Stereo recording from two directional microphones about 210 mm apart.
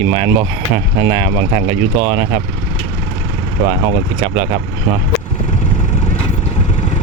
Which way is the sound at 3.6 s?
25° right (ahead or behind).